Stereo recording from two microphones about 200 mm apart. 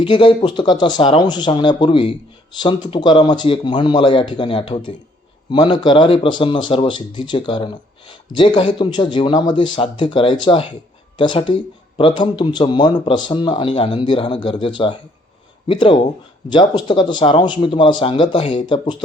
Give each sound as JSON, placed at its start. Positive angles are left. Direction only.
{"t": 0.0, "sound": "speech", "side_deg": 25}